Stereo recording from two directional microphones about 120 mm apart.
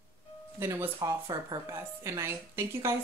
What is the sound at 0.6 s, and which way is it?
Speech, 20° right (ahead or behind).